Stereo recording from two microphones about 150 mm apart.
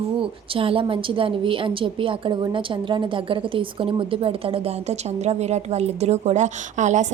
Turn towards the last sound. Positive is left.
turn(degrees=-55)  # may be behind; listen again after turning